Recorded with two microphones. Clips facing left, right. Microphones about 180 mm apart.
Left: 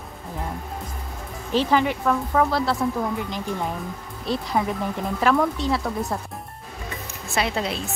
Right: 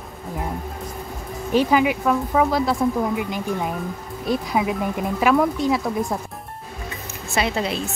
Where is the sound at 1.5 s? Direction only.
10° right (ahead or behind).